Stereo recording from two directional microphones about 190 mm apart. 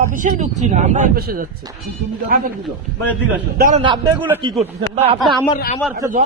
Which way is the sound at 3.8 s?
25° right (ahead or behind).